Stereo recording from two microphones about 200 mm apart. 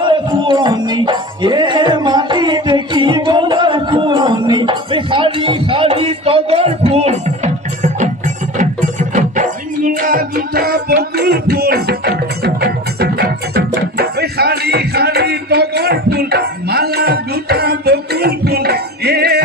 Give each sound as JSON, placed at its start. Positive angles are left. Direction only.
{"t": 0.0, "sound": "music", "side_deg": -25}
{"t": 9.1, "sound": "music", "side_deg": -40}